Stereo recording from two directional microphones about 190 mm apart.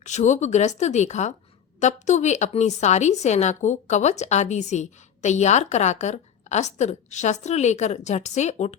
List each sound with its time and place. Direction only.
0.0 s a woman's voice: 40° left (ahead or behind)